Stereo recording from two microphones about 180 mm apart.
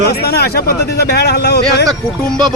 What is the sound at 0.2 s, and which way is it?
Speech, 60° left (ahead or behind).